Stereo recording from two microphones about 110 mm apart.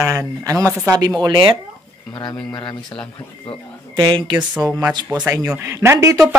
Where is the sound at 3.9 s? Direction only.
45° right (ahead or behind).